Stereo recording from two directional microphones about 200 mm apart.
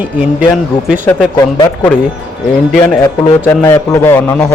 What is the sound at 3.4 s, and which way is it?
Speech, 10° left (ahead or behind).